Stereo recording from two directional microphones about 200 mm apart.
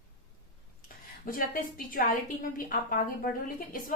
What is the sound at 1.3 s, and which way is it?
Speech, 45° left (ahead or behind).